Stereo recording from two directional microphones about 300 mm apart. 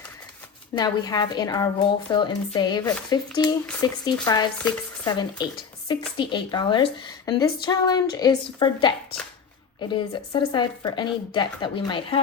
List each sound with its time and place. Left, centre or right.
0.8 s a woman's voice: centre
9.9 s a woman's voice: centre